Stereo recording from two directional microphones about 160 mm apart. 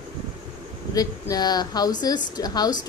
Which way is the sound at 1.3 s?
25° left (ahead or behind).